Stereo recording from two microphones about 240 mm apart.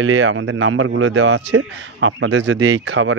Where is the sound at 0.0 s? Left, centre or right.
Right.